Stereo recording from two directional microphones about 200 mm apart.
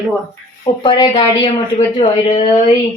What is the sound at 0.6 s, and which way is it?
Speech, 20° left (ahead or behind).